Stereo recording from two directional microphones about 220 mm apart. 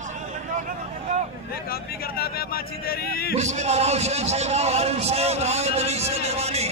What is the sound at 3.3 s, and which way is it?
A man's voice, 30° right (ahead or behind).